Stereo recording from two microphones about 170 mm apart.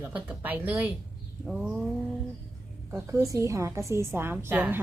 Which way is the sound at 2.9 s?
20° right (ahead or behind).